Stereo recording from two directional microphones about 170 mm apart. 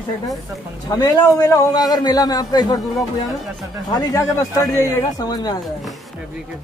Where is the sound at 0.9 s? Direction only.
20° left (ahead or behind).